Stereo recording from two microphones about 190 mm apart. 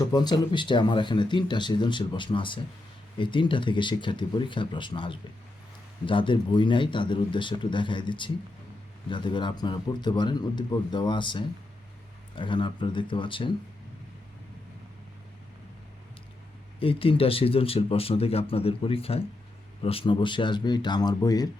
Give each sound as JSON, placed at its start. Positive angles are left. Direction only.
{"t": 0.0, "sound": "speech", "side_deg": 20}
{"t": 16.8, "sound": "speech", "side_deg": 30}